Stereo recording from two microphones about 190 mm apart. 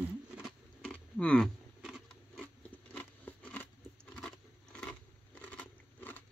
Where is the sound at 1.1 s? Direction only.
5° left (ahead or behind).